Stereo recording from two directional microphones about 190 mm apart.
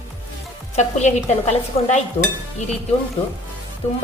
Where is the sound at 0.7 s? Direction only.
35° left (ahead or behind).